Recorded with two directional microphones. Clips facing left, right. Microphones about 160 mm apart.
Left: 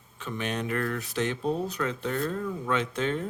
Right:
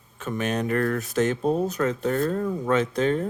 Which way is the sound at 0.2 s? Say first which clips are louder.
Right 5 dB; 45° right (ahead or behind).